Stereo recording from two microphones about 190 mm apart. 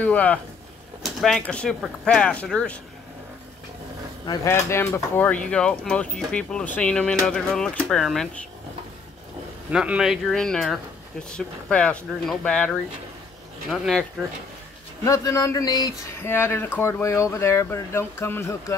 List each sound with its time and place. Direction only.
0.0 s speech: 5° left (ahead or behind)
4.3 s speech: 15° left (ahead or behind)
9.7 s speech: 5° right (ahead or behind)
15.0 s speech: 15° left (ahead or behind)